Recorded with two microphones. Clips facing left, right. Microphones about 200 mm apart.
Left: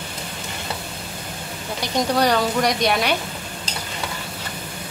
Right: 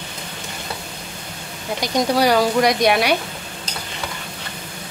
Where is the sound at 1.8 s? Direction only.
10° right (ahead or behind).